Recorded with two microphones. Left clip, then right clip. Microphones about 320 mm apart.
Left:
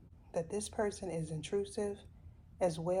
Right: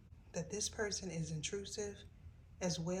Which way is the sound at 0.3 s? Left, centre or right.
Centre.